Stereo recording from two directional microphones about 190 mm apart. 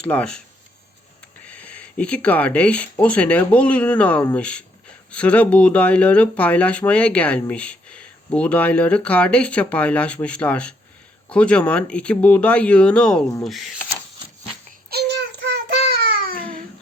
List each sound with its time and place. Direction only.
0.1 s speech: 5° left (ahead or behind)
1.5 s speech: 5° left (ahead or behind)
14.8 s child singing: 60° right (ahead or behind)
16.2 s babbling: 50° right (ahead or behind)